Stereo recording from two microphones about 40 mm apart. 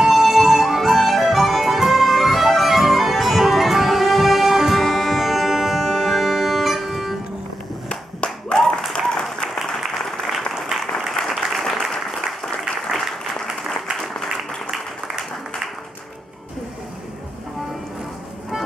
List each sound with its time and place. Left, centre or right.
0.0 s music: centre
7.9 s clapping: left
8.5 s applause: centre
10.7 s applause: centre